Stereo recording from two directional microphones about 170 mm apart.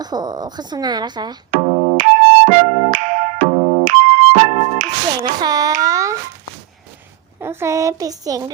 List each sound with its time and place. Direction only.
0.0 s a woman's voice: 25° right (ahead or behind)
1.6 s music: 30° right (ahead or behind)
2.0 s music: 45° right (ahead or behind)
3.8 s music: 45° right (ahead or behind)
5.2 s a woman's voice: 25° right (ahead or behind)
5.8 s a sound: 20° right (ahead or behind)
7.3 s a child's voice: 15° right (ahead or behind)